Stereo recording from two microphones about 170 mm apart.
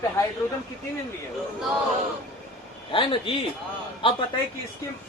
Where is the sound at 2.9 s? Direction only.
30° left (ahead or behind).